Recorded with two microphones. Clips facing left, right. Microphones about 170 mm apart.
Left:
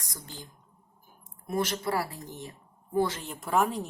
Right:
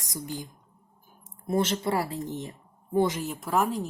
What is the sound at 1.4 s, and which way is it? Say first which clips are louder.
A woman's voice: right 4 dB; 25° right (ahead or behind).